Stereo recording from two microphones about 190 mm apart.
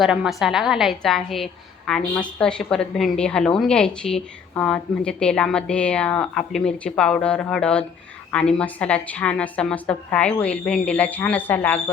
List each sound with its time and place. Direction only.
0.0 s a woman's voice: 5° right (ahead or behind)